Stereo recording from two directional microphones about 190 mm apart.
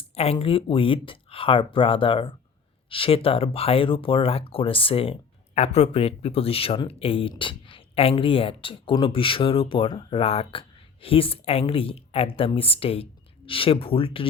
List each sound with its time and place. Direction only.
0.1 s speech: 35° left (ahead or behind)